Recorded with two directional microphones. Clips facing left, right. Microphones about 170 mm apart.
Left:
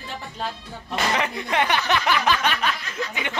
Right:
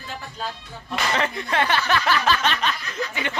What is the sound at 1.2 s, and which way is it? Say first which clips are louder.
Speech: even; 15° left (ahead or behind).